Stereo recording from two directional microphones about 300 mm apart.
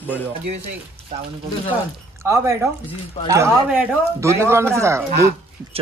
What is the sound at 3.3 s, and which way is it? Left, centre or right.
Speech, centre.